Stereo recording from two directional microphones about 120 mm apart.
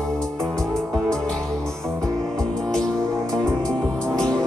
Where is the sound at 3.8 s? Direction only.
5° left (ahead or behind).